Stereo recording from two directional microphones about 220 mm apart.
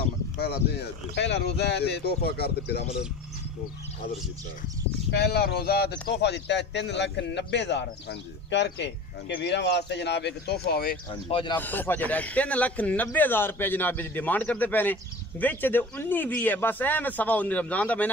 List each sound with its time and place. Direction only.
1.1 s speech: 50° left (ahead or behind)
5.1 s speech: 45° left (ahead or behind)
11.1 s speech: 25° left (ahead or behind)
11.6 s a man's voice: 10° left (ahead or behind)